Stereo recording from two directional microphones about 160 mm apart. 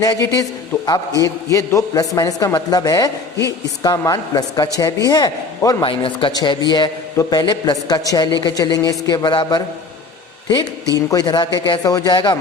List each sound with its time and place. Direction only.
0.0 s a man's voice: 20° left (ahead or behind)
10.9 s a man's voice: 20° left (ahead or behind)